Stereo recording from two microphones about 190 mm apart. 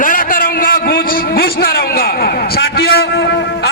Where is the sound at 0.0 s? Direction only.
45° left (ahead or behind).